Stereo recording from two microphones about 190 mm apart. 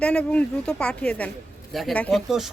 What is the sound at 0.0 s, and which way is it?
Speech, 5° left (ahead or behind).